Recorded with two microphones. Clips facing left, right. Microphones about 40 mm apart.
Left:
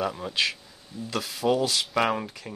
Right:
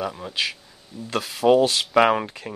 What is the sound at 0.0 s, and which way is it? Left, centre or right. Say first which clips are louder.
Speech: even; centre.